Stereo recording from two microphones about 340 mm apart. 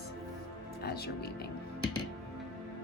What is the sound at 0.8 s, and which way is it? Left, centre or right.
Speech, left.